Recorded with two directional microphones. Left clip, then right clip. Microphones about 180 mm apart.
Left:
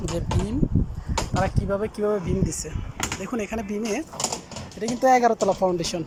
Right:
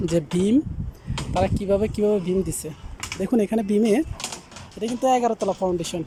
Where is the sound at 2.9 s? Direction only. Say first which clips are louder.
Left 6 dB; 45° left (ahead or behind).